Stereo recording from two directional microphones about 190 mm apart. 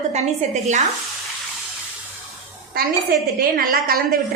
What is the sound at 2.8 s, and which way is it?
A woman's voice, 50° right (ahead or behind).